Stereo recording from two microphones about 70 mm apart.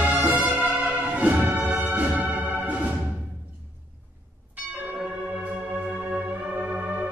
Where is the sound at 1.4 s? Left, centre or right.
Right.